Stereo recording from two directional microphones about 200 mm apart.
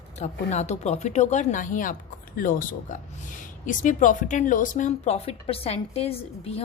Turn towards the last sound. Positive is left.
turn(degrees=30)  # may be behind; listen again after turning